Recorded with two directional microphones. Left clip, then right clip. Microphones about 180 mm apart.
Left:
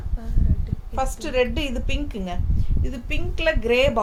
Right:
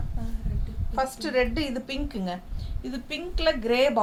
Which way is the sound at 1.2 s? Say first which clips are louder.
Left 5 dB; 20° left (ahead or behind).